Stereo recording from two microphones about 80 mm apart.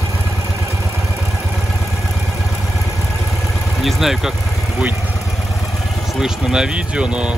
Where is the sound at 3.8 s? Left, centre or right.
Centre.